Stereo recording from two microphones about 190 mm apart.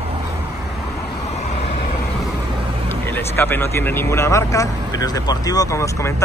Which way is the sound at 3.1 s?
10° left (ahead or behind).